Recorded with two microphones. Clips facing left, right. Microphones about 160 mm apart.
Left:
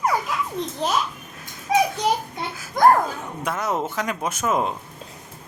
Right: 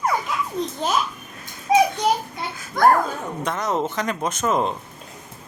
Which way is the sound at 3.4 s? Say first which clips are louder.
Right 1 dB; 5° left (ahead or behind).